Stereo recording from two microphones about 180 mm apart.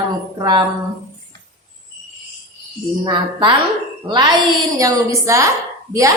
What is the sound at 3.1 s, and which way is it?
Speech, 25° right (ahead or behind).